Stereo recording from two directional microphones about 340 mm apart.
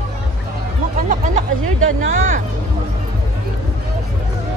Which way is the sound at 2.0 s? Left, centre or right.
Right.